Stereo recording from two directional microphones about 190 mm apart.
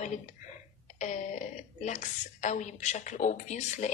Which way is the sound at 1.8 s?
40° left (ahead or behind).